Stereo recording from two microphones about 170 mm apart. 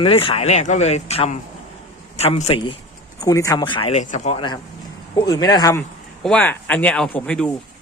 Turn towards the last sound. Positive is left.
turn(degrees=5)  # may be behind; listen again after turning